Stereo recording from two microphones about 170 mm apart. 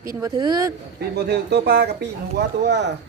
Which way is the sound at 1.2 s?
75° right (ahead or behind).